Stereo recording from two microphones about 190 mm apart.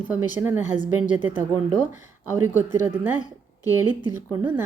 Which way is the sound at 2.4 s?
10° right (ahead or behind).